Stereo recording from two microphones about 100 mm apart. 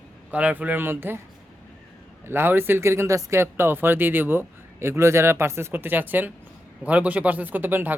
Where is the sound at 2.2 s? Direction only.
25° right (ahead or behind).